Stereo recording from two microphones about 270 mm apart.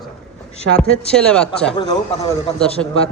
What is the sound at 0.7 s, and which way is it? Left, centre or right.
A man's voice, centre.